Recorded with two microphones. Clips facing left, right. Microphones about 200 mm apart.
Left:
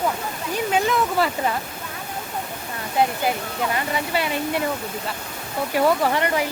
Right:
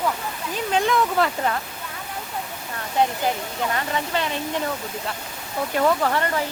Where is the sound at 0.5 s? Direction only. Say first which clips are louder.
Even; 5° left (ahead or behind).